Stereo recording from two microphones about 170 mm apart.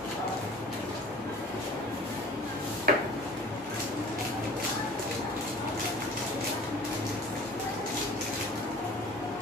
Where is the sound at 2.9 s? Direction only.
60° right (ahead or behind).